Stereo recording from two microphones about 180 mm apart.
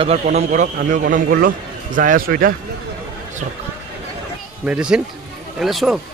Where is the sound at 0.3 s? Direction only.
45° right (ahead or behind).